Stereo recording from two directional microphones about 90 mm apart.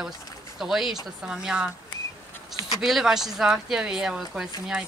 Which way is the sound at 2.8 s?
5° right (ahead or behind).